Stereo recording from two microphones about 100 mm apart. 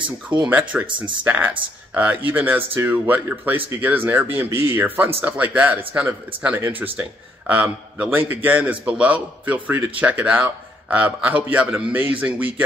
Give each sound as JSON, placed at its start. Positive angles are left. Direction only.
{"t": 0.5, "sound": "a man's voice", "side_deg": -15}
{"t": 0.8, "sound": "speech", "side_deg": -55}
{"t": 1.2, "sound": "a man's voice", "side_deg": -20}